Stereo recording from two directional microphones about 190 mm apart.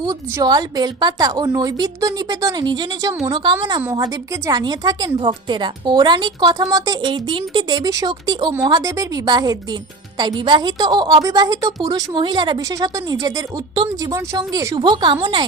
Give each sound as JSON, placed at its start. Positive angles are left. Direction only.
{"t": 0.0, "sound": "a woman's voice", "side_deg": -20}